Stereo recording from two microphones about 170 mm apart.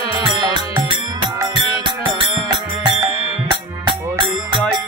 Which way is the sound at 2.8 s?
25° right (ahead or behind).